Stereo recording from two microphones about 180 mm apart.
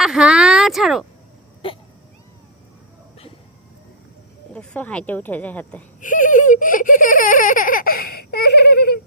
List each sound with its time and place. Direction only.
0.0 s a sound: 5° right (ahead or behind)
4.5 s speech: 5° left (ahead or behind)
6.0 s giggle: 45° left (ahead or behind); by 9.0 s 60° left (ahead or behind)